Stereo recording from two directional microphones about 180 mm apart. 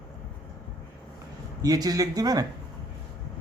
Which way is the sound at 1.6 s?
20° right (ahead or behind).